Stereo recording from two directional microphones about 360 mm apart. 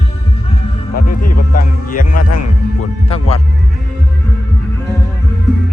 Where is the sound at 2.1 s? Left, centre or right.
Left.